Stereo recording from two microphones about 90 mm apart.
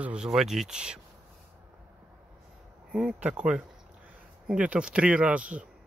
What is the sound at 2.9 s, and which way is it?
Speech, 5° right (ahead or behind).